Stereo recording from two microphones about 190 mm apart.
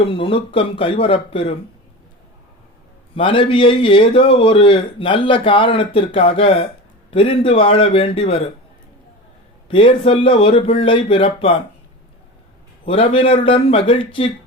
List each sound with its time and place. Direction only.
0.0 s a man's voice: 30° left (ahead or behind)
3.2 s a man's voice: 25° left (ahead or behind)
9.6 s a man's voice: 30° left (ahead or behind)
12.8 s a man's voice: 30° left (ahead or behind)